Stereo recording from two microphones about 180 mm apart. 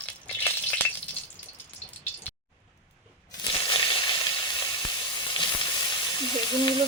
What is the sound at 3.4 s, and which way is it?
Sizzle, 30° left (ahead or behind).